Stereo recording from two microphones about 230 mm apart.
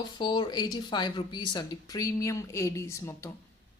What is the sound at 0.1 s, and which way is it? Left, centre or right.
Speech, centre.